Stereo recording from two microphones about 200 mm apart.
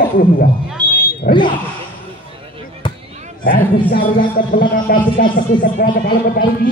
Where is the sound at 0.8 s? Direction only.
20° right (ahead or behind).